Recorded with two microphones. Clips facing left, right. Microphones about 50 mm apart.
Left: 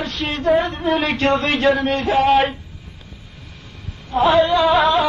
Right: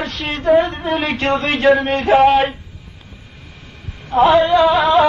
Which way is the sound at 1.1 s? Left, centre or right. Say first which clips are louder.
Even; centre.